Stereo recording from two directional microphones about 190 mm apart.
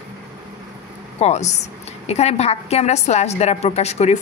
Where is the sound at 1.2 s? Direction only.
35° left (ahead or behind).